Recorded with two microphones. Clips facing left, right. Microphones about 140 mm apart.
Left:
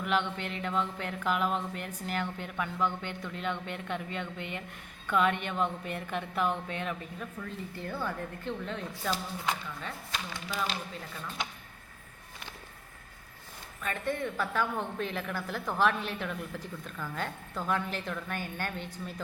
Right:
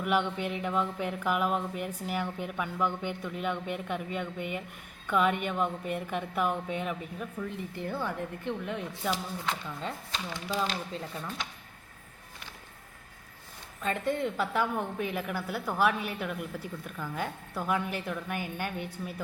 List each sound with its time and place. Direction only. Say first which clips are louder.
0.0 s a woman's voice: right 2 dB; 10° right (ahead or behind)
9.8 s speech: right 2 dB; 25° right (ahead or behind)
13.8 s a woman's voice: right 3 dB; 20° right (ahead or behind)